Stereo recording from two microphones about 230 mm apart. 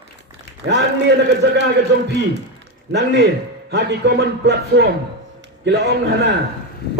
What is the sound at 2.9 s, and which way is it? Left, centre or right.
A man's voice, right.